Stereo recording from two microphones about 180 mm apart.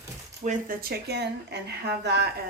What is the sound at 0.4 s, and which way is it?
Speech, 55° right (ahead or behind).